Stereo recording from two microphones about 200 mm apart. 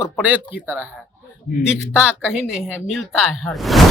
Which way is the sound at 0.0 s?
5° right (ahead or behind).